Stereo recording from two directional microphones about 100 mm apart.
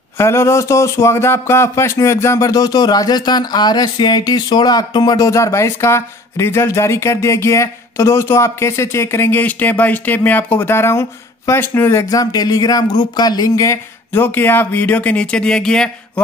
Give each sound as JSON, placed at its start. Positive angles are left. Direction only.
{"t": 0.2, "sound": "speech", "side_deg": 30}